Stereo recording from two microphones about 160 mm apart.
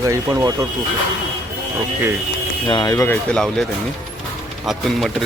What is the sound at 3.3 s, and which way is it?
Speech, 5° left (ahead or behind).